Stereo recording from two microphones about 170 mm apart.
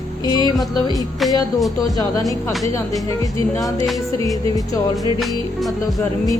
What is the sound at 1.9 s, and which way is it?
Speech, 20° left (ahead or behind).